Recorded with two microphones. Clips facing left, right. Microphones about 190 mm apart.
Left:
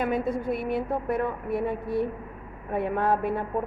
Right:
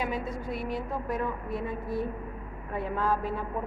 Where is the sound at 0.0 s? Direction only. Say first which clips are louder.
Left 6 dB; 55° left (ahead or behind).